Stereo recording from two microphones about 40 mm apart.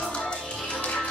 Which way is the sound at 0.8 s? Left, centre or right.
Left.